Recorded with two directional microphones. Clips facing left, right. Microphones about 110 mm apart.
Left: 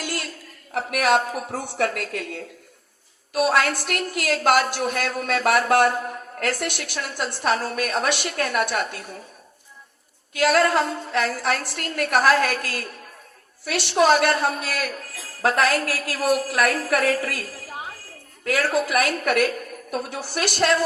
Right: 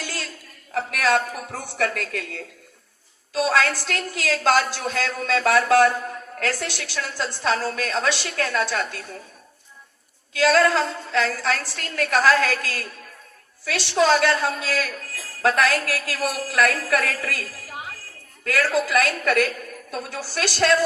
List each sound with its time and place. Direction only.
0.0 s a sound: 15° left (ahead or behind)
0.7 s a woman's voice: 15° left (ahead or behind)
10.4 s a woman's voice: 15° left (ahead or behind)
18.4 s a woman's voice: 20° left (ahead or behind)